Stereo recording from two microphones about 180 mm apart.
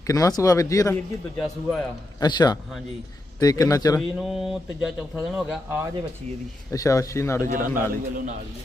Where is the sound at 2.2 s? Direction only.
20° left (ahead or behind).